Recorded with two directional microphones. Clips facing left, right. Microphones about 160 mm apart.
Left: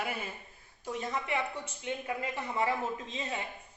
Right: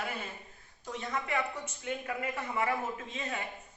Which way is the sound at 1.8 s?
25° left (ahead or behind).